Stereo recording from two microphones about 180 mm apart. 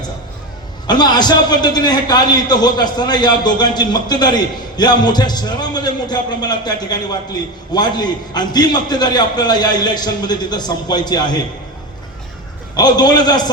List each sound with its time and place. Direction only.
0.9 s a man's voice: 25° left (ahead or behind)
12.7 s a man's voice: 25° left (ahead or behind)